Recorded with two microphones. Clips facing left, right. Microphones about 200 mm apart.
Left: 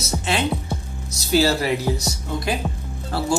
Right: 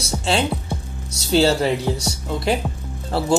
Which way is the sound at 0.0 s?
30° right (ahead or behind).